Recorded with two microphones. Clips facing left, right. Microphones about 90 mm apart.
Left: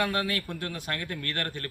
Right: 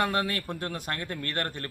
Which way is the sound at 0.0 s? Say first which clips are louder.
Right 1 dB; 30° right (ahead or behind).